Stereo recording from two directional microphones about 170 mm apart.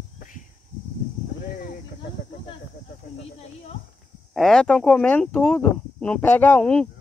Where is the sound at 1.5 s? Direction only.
55° left (ahead or behind).